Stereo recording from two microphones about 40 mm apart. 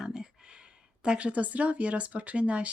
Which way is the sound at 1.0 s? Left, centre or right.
Right.